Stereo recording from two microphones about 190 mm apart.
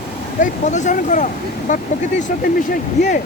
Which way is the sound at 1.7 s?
40° left (ahead or behind).